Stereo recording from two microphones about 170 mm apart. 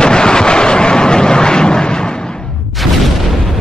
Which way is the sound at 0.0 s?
5° left (ahead or behind).